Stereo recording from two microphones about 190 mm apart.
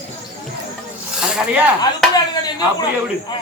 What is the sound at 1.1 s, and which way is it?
Snake, 5° right (ahead or behind).